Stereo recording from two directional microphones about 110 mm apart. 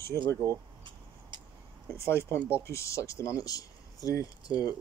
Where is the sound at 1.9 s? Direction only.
25° left (ahead or behind).